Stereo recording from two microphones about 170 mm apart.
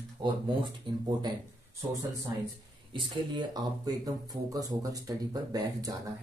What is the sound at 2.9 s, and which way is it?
Speech, 25° right (ahead or behind).